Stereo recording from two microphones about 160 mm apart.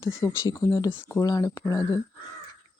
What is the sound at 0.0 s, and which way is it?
Speech, 15° left (ahead or behind).